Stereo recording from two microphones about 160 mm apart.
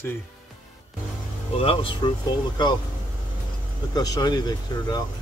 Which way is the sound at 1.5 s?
35° left (ahead or behind).